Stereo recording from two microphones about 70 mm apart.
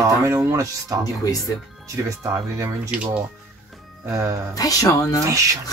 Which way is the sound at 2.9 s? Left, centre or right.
Centre.